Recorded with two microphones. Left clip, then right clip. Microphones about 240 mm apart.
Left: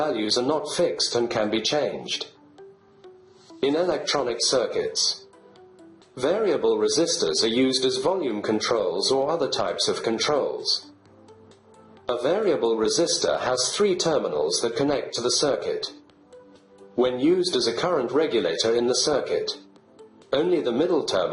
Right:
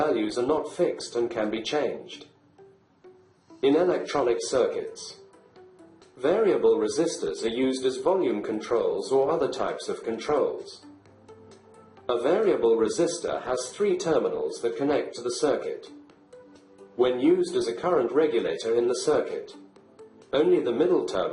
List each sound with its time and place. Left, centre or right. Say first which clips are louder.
0.0 s a man's voice: left 2 dB; left
3.6 s a man's voice: right 1 dB; left
6.1 s a man's voice: even; left
12.0 s a man's voice: even; left
17.0 s a man's voice: left 1 dB; left
20.3 s a man's voice: even; left